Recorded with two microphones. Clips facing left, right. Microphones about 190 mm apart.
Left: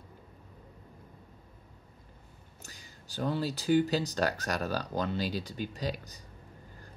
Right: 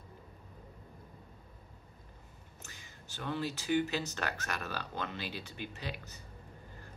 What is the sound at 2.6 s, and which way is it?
Speech, 35° left (ahead or behind).